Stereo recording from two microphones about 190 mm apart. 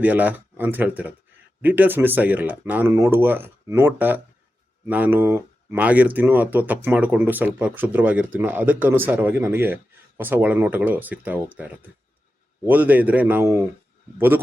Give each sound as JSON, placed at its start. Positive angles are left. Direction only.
{"t": 0.0, "sound": "speech", "side_deg": -10}